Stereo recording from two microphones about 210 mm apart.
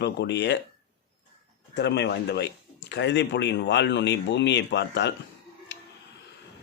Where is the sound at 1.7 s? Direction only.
55° left (ahead or behind).